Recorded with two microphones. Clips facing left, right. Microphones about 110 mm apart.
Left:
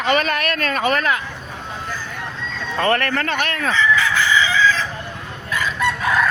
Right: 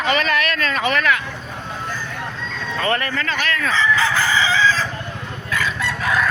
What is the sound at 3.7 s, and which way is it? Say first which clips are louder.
Crowing: left 1 dB; 30° right (ahead or behind).